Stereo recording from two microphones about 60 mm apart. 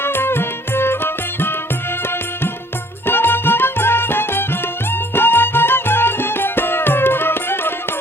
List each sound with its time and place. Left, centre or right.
0.0 s music: left
3.1 s music: left